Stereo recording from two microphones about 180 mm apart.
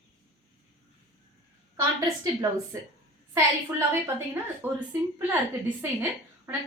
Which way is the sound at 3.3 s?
15° right (ahead or behind).